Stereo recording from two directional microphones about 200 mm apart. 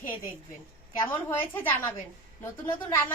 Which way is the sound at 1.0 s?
10° left (ahead or behind).